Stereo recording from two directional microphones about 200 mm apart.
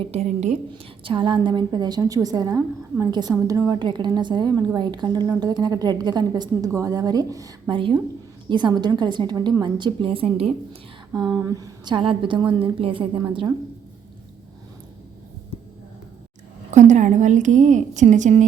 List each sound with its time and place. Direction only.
0.0 s a woman's voice: 30° right (ahead or behind)
0.7 s a woman's voice: 25° right (ahead or behind)
16.7 s a woman's voice: 35° right (ahead or behind)